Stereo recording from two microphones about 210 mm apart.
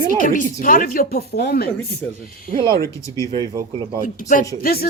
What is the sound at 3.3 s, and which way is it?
Speech, 20° right (ahead or behind).